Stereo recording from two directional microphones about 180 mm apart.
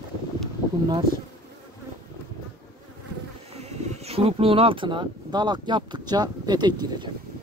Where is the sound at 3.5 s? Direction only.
40° right (ahead or behind).